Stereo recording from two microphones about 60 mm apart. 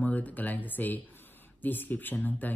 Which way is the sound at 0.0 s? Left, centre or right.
Left.